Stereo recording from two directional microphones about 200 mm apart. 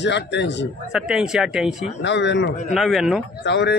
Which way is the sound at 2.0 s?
60° left (ahead or behind).